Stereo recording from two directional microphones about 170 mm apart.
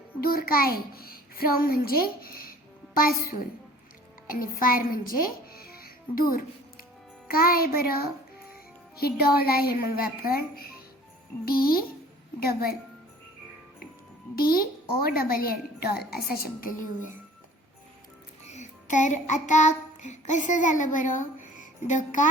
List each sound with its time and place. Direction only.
0.2 s a child's voice: 60° left (ahead or behind)
4.6 s music: 55° left (ahead or behind)
7.3 s speech: 60° left (ahead or behind)
14.3 s speech: 60° left (ahead or behind)
18.4 s child singing: 45° left (ahead or behind)